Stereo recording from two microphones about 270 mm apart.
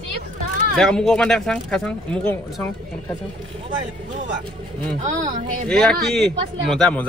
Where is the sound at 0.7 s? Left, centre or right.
Centre.